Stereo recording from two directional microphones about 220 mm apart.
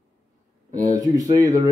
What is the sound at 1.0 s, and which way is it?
Speech, 15° right (ahead or behind).